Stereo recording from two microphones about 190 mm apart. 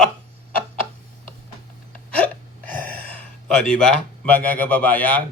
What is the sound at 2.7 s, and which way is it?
Speech, 10° left (ahead or behind).